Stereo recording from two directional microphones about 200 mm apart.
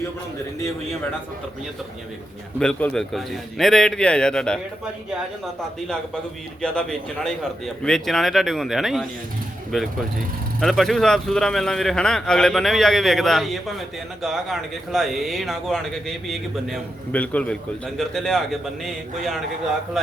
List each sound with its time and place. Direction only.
2.6 s speech: 5° left (ahead or behind)
6.6 s speech: 5° left (ahead or behind)
10.6 s speech: centre (ahead or behind)